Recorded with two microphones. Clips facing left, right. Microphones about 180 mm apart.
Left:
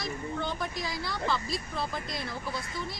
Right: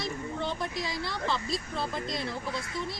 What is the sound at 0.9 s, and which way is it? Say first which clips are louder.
Speech: even; centre (ahead or behind).